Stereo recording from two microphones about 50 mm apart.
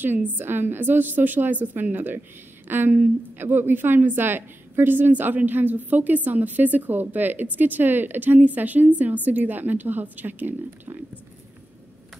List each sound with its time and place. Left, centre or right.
0.0 s a woman's voice: right